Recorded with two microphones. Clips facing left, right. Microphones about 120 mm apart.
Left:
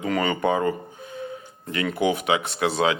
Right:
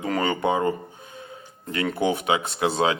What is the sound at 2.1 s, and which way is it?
Speech, 30° right (ahead or behind).